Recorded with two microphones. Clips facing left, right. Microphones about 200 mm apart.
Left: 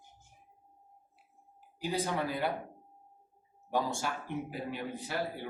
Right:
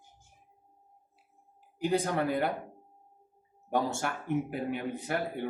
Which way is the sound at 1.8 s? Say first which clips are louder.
Right 5 dB; 55° right (ahead or behind).